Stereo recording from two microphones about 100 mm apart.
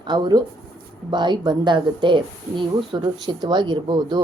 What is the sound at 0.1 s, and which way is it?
Speech, 40° right (ahead or behind).